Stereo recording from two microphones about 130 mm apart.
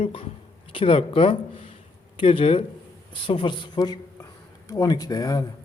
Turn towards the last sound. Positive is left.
turn(degrees=30)  # may be behind; listen again after turning